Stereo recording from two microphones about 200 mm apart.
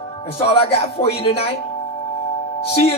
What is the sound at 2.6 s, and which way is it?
Speech, 30° left (ahead or behind).